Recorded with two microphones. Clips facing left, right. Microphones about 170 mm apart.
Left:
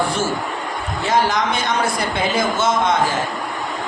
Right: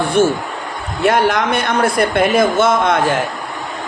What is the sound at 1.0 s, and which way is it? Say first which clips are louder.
Speech: right 5 dB; 60° right (ahead or behind).